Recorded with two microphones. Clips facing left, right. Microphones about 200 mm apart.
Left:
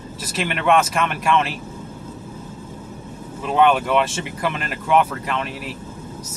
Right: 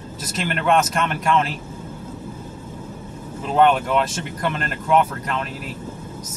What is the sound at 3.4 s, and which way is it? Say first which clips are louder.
Speech: even; centre (ahead or behind).